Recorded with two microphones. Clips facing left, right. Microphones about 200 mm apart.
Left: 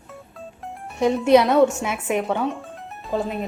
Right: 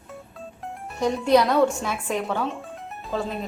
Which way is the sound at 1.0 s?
20° left (ahead or behind).